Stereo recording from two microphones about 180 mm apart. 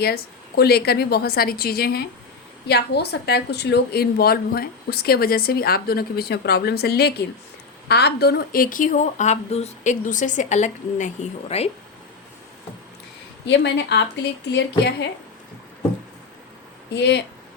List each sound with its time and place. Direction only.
0.0 s a woman's voice: 60° left (ahead or behind); by 11.7 s 35° left (ahead or behind)
13.5 s a woman's voice: 75° left (ahead or behind)
16.9 s a woman's voice: 70° left (ahead or behind)